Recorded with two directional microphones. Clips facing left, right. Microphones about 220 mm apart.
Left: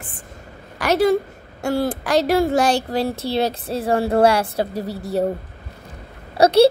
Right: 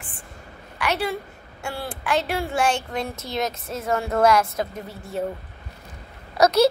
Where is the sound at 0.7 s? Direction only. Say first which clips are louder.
Left 9 dB; 40° left (ahead or behind).